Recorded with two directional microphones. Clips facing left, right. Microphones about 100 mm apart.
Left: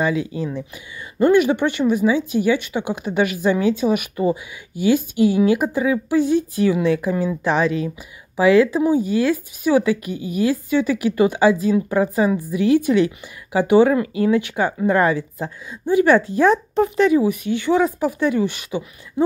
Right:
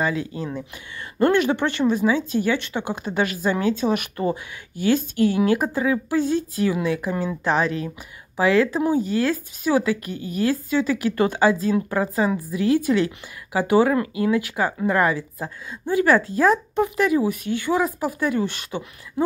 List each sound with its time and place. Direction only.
1.2 s speech: 15° left (ahead or behind)
7.1 s speech: 5° left (ahead or behind)
8.4 s a woman's voice: 15° left (ahead or behind)